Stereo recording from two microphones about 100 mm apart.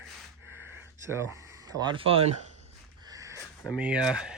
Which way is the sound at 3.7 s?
10° right (ahead or behind).